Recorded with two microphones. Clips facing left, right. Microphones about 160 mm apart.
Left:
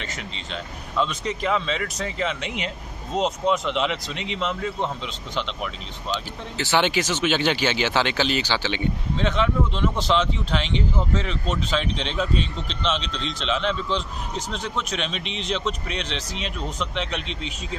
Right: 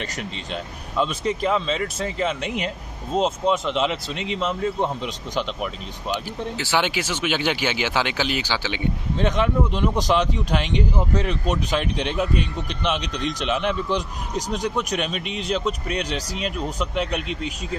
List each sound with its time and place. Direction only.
0.5 s a man's voice: 10° right (ahead or behind)
1.7 s speech: 35° right (ahead or behind)
3.5 s speech: centre (ahead or behind)
6.6 s a man's voice: 10° right (ahead or behind)